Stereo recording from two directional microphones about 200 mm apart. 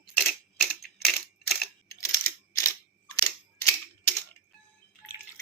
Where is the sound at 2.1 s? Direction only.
15° left (ahead or behind).